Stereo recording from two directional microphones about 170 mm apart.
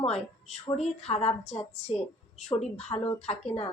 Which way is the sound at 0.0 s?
40° left (ahead or behind).